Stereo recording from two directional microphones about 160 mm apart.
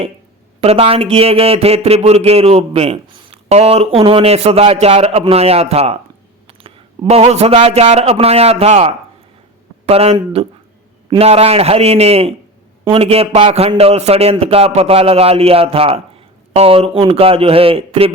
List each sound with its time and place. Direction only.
0.6 s speech: 40° right (ahead or behind)